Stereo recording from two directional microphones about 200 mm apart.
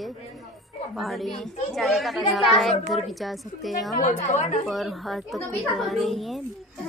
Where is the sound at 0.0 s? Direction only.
Centre (ahead or behind).